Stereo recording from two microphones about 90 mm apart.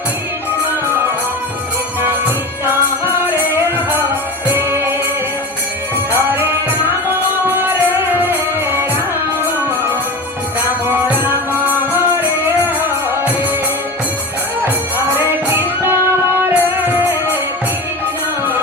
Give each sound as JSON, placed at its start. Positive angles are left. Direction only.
{"t": 3.0, "sound": "music", "side_deg": -25}
{"t": 6.1, "sound": "music", "side_deg": -25}
{"t": 14.6, "sound": "music", "side_deg": -25}